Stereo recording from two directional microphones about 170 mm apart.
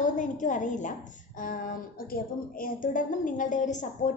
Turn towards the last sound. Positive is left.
turn(degrees=45)  # may be behind; listen again after turning